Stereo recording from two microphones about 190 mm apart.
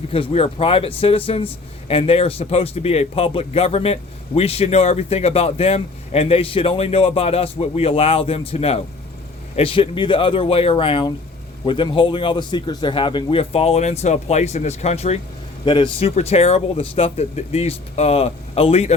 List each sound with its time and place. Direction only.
0.1 s speech: 30° left (ahead or behind)